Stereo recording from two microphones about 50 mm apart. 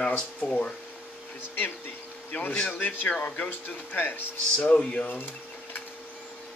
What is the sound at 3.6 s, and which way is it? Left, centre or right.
A man's voice, left.